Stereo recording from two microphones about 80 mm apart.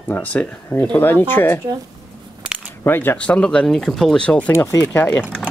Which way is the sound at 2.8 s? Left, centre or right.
Left.